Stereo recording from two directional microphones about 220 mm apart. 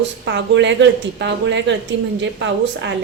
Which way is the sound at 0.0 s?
55° right (ahead or behind).